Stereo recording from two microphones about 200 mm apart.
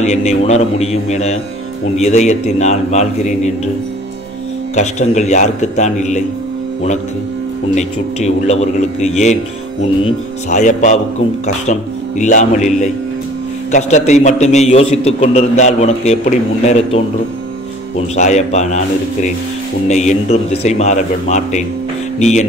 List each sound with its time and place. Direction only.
0.0 s a man's voice: 35° left (ahead or behind)
4.7 s a man's voice: 35° left (ahead or behind)
7.7 s a man's voice: 35° left (ahead or behind)
10.5 s a man's voice: 40° left (ahead or behind)
18.1 s a man's voice: 35° left (ahead or behind)
19.9 s a man's voice: 35° left (ahead or behind)